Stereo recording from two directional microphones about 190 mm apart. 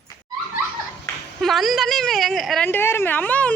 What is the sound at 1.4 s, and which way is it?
A woman's voice, centre (ahead or behind).